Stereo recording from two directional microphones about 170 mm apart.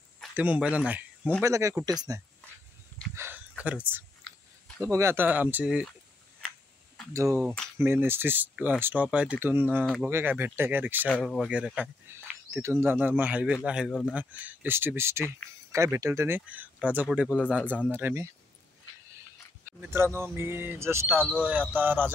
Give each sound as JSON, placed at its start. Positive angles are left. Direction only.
{"t": 0.3, "sound": "speech", "side_deg": -10}
{"t": 3.2, "sound": "speech", "side_deg": -10}
{"t": 7.8, "sound": "speech", "side_deg": -15}
{"t": 11.1, "sound": "speech", "side_deg": 5}
{"t": 19.8, "sound": "speech", "side_deg": -15}